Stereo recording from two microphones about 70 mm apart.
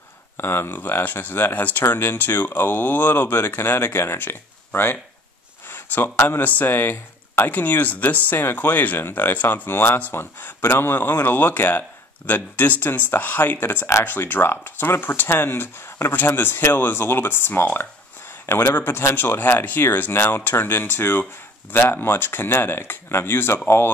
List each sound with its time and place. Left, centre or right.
0.4 s speech: left
5.7 s a sound: left
6.2 s speech: left